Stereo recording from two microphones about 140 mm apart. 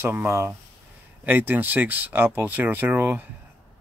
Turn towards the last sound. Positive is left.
turn(degrees=-15)  # may be behind; listen again after turning